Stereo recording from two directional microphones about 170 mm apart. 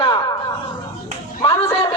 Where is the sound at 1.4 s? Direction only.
25° left (ahead or behind).